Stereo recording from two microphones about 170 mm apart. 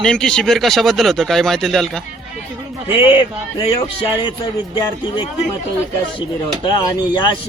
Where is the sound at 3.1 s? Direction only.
30° left (ahead or behind).